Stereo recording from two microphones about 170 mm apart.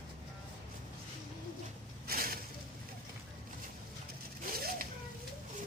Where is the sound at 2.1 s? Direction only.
60° right (ahead or behind).